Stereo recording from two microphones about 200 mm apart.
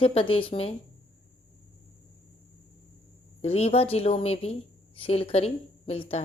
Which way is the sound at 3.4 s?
30° left (ahead or behind).